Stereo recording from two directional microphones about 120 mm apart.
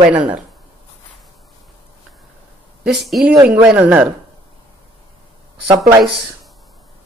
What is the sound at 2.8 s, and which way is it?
Speech, centre (ahead or behind).